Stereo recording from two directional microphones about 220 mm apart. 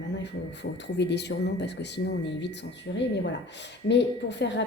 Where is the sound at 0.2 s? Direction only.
50° left (ahead or behind).